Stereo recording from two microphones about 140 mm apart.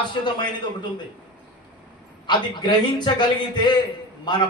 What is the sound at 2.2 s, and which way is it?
A man's voice, 30° left (ahead or behind).